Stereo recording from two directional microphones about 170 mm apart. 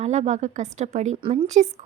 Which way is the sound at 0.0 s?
40° right (ahead or behind).